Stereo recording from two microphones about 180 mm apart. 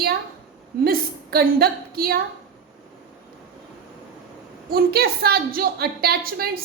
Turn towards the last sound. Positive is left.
turn(degrees=-55)  # may be behind; listen again after turning